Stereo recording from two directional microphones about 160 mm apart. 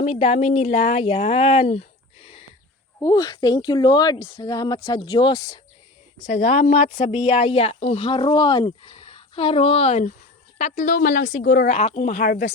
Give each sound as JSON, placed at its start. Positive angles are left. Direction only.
{"t": 0.0, "sound": "speech", "side_deg": 40}
{"t": 3.0, "sound": "speech", "side_deg": 20}
{"t": 6.2, "sound": "speech", "side_deg": 45}